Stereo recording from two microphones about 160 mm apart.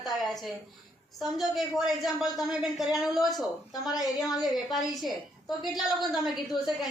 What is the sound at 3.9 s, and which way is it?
Speech, 25° left (ahead or behind).